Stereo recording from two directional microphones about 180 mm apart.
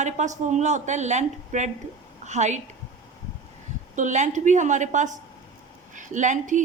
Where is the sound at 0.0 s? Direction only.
40° right (ahead or behind).